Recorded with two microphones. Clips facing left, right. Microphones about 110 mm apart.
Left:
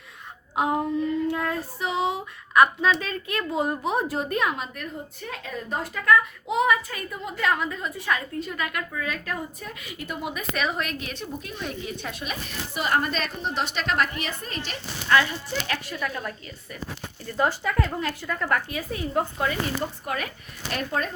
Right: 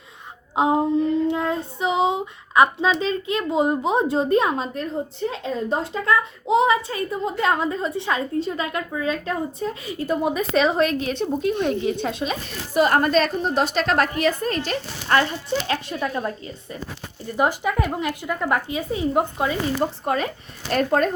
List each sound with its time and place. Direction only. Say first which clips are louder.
0.5 s child singing: right 5 dB; 25° right (ahead or behind)
12.7 s a woman's voice: right 8 dB; 45° right (ahead or behind)
15.6 s child singing: right 5 dB; 30° right (ahead or behind)
17.3 s speech: right 3 dB; 15° right (ahead or behind)
20.1 s child singing: right 7 dB; 30° right (ahead or behind)
20.7 s speech: right 9 dB; 40° right (ahead or behind)